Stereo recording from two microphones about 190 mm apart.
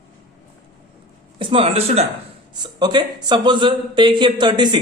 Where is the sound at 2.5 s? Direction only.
20° right (ahead or behind).